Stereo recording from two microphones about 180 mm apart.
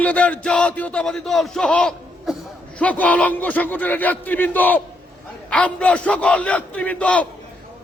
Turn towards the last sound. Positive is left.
turn(degrees=10)  # may be behind; listen again after turning